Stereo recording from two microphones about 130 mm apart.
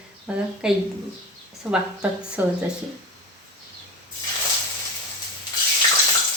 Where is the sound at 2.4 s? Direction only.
15° right (ahead or behind).